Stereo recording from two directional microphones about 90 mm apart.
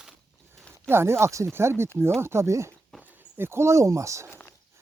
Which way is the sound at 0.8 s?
30° right (ahead or behind).